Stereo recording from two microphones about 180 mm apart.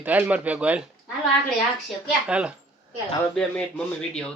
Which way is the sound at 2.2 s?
5° right (ahead or behind).